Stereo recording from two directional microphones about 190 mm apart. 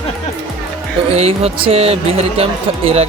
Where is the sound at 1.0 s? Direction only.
30° right (ahead or behind).